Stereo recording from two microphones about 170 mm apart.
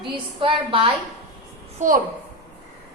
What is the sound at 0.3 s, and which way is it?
Speech, 30° right (ahead or behind).